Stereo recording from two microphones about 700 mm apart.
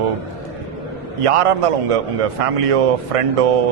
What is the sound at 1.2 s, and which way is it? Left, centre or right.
A man's voice, right.